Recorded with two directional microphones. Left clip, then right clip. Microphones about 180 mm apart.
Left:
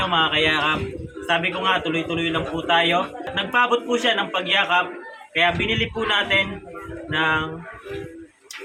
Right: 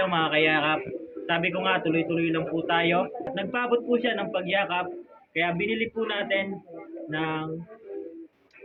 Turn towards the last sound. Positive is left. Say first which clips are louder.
# left 9 dB
turn(degrees=20)  # may be behind; listen again after turning